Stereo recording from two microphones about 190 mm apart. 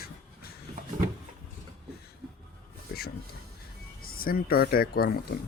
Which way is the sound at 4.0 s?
50° left (ahead or behind).